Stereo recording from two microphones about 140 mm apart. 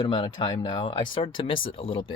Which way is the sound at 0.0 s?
35° left (ahead or behind).